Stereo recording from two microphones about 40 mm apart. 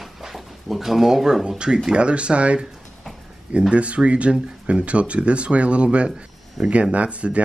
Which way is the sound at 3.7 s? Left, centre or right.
Right.